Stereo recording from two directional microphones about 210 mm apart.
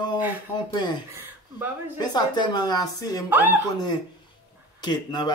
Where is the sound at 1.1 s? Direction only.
10° right (ahead or behind).